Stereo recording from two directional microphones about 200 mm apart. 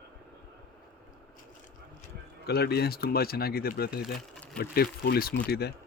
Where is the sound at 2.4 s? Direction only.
55° left (ahead or behind).